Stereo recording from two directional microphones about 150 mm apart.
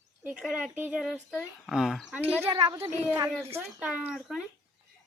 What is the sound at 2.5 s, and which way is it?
Speech, 30° right (ahead or behind).